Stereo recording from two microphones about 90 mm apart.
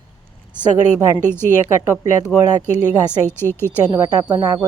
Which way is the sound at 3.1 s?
25° left (ahead or behind).